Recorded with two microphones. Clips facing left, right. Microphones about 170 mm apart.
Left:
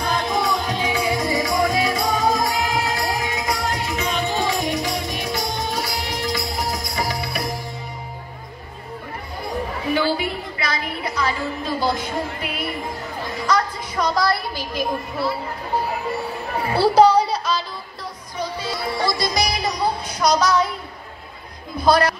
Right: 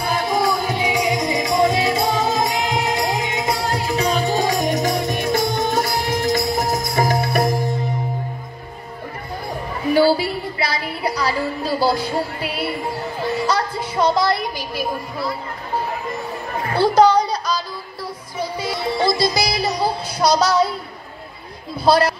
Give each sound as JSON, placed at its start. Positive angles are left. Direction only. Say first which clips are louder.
{"t": 0.0, "sound": "music", "louder": "right 2 dB", "side_deg": -5}
{"t": 9.9, "sound": "a sound", "louder": "right 7 dB", "side_deg": -35}
{"t": 13.5, "sound": "a woman's voice", "louder": "even", "side_deg": -30}
{"t": 16.8, "sound": "a sound", "louder": "even", "side_deg": 5}
{"t": 18.4, "sound": "music", "louder": "right 2 dB", "side_deg": -10}
{"t": 18.8, "sound": "music", "louder": "right 5 dB", "side_deg": -25}
{"t": 21.7, "sound": "a woman's voice", "louder": "right 1 dB", "side_deg": -30}